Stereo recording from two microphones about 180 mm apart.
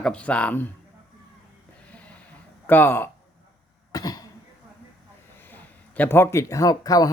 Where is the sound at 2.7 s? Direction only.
10° left (ahead or behind).